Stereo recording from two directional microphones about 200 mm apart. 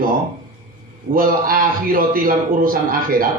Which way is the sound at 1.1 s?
45° right (ahead or behind).